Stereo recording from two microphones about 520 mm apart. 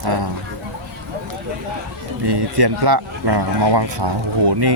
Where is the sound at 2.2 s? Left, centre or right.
Right.